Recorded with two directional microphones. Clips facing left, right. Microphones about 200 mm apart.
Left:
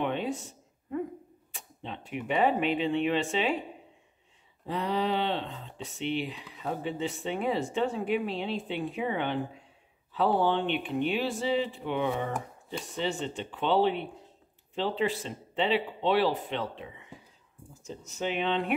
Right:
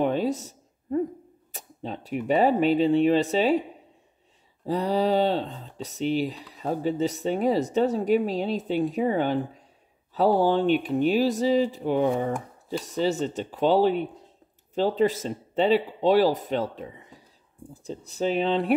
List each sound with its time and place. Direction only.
0.0 s a sound: 40° right (ahead or behind)
1.5 s speech: 40° right (ahead or behind)
4.6 s speech: 35° right (ahead or behind)